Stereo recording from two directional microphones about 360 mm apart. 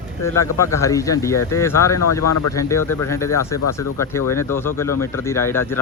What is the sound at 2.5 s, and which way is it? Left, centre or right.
Speech, centre.